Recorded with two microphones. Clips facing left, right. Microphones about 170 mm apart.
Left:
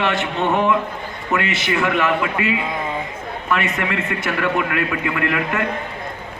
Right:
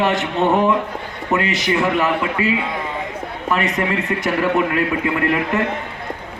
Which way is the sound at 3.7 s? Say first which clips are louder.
Right 3 dB; 35° right (ahead or behind).